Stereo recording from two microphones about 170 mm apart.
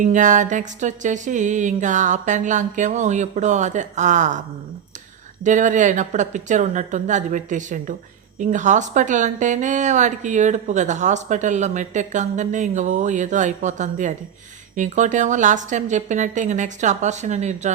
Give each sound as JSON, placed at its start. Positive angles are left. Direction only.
{"t": 0.0, "sound": "a woman's voice", "side_deg": -45}